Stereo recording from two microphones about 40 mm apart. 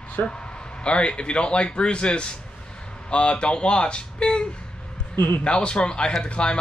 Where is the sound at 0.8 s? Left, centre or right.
Left.